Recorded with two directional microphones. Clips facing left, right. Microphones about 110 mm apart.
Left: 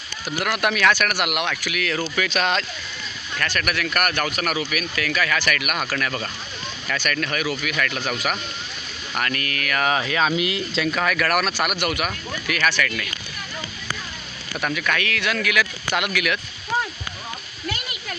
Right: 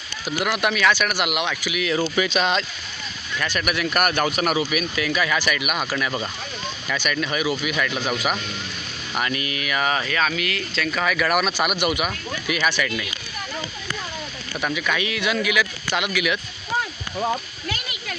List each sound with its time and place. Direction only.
0.4 s speech: centre (ahead or behind)
1.6 s speech: 10° right (ahead or behind)
3.3 s speech: 10° right (ahead or behind)
4.1 s speech: 25° right (ahead or behind)
5.5 s speech: 5° right (ahead or behind)
5.9 s speech: 15° right (ahead or behind); by 10.2 s 5° left (ahead or behind)
10.2 s speech: 20° left (ahead or behind)
10.9 s speech: centre (ahead or behind)
14.6 s speech: 5° right (ahead or behind)